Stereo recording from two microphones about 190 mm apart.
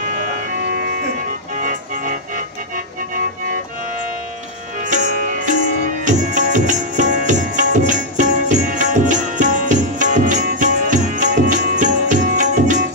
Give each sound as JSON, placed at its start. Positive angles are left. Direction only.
{"t": 1.5, "sound": "music", "side_deg": -45}
{"t": 4.8, "sound": "music", "side_deg": -40}